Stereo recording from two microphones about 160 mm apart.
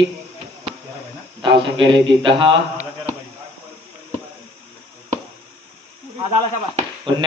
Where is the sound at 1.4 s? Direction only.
35° right (ahead or behind).